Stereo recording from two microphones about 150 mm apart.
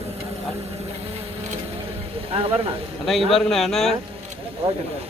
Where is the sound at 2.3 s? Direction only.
40° right (ahead or behind).